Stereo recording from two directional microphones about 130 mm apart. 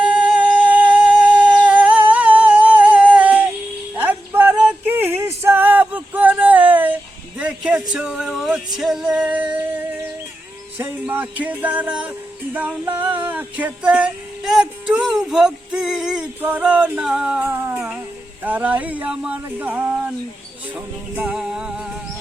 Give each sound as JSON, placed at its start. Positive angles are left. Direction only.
{"t": 0.2, "sound": "humming", "side_deg": -10}
{"t": 3.9, "sound": "music", "side_deg": -15}
{"t": 13.0, "sound": "a sound", "side_deg": -40}
{"t": 13.2, "sound": "music", "side_deg": -10}
{"t": 17.7, "sound": "music", "side_deg": -5}
{"t": 18.4, "sound": "a sound", "side_deg": -15}
{"t": 20.7, "sound": "music", "side_deg": -10}